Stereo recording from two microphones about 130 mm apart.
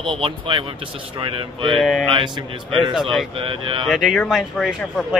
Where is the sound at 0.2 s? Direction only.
40° right (ahead or behind).